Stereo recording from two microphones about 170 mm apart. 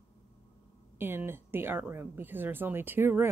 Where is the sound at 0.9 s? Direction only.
10° right (ahead or behind).